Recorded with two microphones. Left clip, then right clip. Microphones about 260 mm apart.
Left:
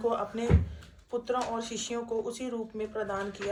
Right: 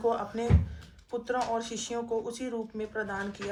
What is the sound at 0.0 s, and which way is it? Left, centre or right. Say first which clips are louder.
Speech: right 1 dB; right.